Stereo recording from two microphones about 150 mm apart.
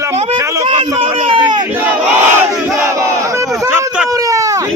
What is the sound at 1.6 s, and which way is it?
Battle cry, 10° right (ahead or behind).